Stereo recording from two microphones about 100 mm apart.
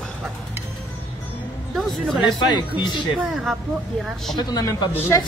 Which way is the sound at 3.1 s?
Centre (ahead or behind).